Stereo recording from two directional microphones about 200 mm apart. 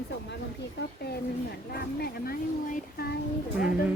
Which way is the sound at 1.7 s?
50° left (ahead or behind).